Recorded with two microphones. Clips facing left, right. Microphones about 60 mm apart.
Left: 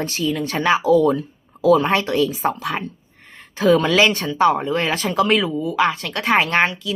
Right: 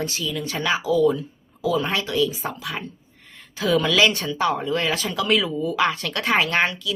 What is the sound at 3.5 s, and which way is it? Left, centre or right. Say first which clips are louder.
Speech: left 4 dB; left.